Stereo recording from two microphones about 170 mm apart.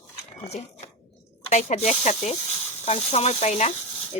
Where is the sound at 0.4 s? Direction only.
40° left (ahead or behind).